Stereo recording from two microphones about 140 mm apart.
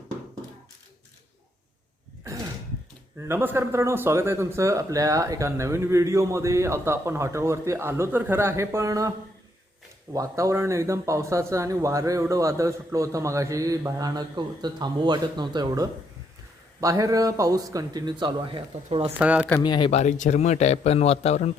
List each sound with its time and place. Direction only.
3.2 s speech: 15° right (ahead or behind); by 19.1 s 45° right (ahead or behind)
19.2 s speech: 10° right (ahead or behind)
19.6 s speech: 30° left (ahead or behind)
19.9 s a man's voice: 55° left (ahead or behind)